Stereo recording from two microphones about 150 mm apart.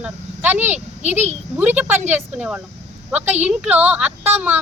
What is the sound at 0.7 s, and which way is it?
Speech, 50° right (ahead or behind).